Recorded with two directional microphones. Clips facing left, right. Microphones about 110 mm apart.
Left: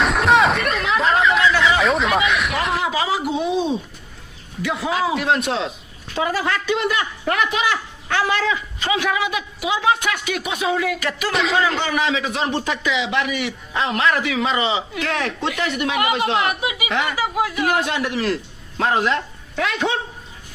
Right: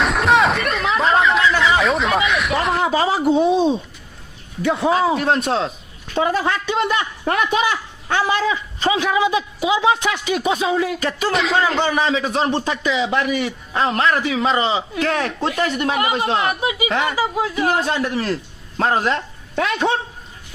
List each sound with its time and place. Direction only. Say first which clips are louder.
0.0 s a sound: even; centre (ahead or behind)
2.8 s a man's voice: right 4 dB; 35° right (ahead or behind)
4.6 s a man's voice: right 5 dB; 35° right (ahead or behind)
6.1 s a man's voice: right 3 dB; 30° right (ahead or behind)
8.0 s a man's voice: right 2 dB; 20° right (ahead or behind)
11.3 s a man's voice: right 1 dB; centre (ahead or behind)
11.8 s a man's voice: right 3 dB; 35° right (ahead or behind)